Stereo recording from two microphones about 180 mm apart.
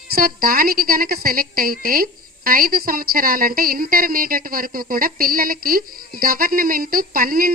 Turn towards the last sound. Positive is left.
turn(degrees=-55)  # may be behind; listen again after turning